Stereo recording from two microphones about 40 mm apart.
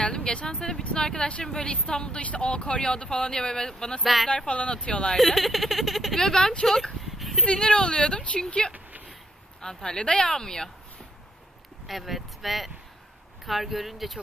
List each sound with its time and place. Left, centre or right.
0.0 s speech: left
4.0 s speech: centre
4.5 s speech: left
5.1 s speech: centre
7.2 s a sound: centre
7.4 s speech: left
8.7 s a sound: right
9.6 s speech: centre
11.9 s speech: centre